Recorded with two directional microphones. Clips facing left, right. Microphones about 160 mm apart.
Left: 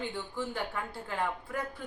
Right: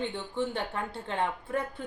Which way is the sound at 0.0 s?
25° right (ahead or behind).